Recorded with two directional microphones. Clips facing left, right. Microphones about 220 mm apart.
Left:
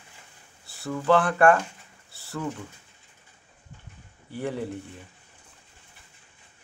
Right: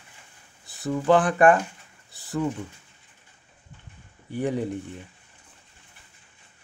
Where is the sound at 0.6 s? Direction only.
20° right (ahead or behind).